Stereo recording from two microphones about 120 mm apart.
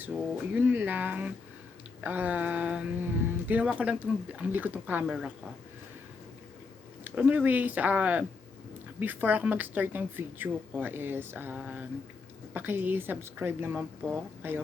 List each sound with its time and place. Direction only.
0.0 s a woman's voice: 10° right (ahead or behind)
7.0 s a woman's voice: 15° right (ahead or behind)